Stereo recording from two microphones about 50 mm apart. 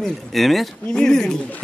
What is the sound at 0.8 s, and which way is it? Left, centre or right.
Speech, centre.